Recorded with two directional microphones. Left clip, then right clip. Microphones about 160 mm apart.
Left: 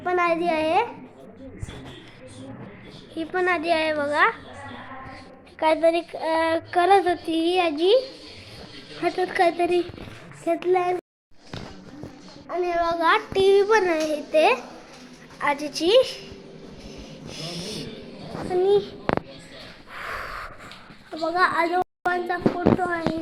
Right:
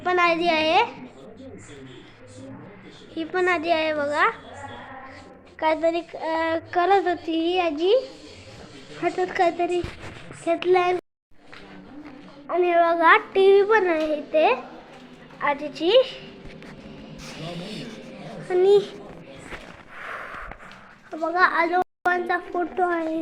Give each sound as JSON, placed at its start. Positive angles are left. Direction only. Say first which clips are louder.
{"t": 0.0, "sound": "a woman's voice", "louder": "right 2 dB", "side_deg": 10}
{"t": 3.2, "sound": "a child's voice", "louder": "right 1 dB", "side_deg": 5}
{"t": 5.5, "sound": "speech", "louder": "left 2 dB", "side_deg": 10}
{"t": 9.0, "sound": "a child's voice", "louder": "left 1 dB", "side_deg": 0}
{"t": 12.5, "sound": "a child's voice", "louder": "right 4 dB", "side_deg": -25}
{"t": 17.3, "sound": "a sound", "louder": "left 2 dB", "side_deg": -5}
{"t": 18.5, "sound": "a woman's voice", "louder": "right 3 dB", "side_deg": -10}
{"t": 20.0, "sound": "a sound", "louder": "left 2 dB", "side_deg": 25}
{"t": 21.2, "sound": "a child's voice", "louder": "right 1 dB", "side_deg": 5}
{"t": 22.8, "sound": "speech", "louder": "right 3 dB", "side_deg": -25}